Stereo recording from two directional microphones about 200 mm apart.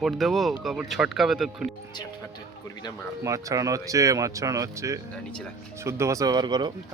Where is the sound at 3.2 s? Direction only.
15° right (ahead or behind).